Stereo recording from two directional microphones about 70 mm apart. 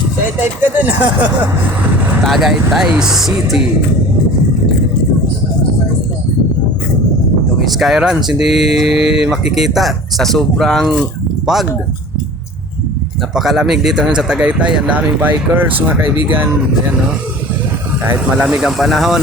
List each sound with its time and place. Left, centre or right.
0.3 s speech: right
2.2 s speech: centre
7.6 s speech: centre
11.5 s speech: centre
13.3 s speech: centre; by 16.5 s right
18.3 s speech: centre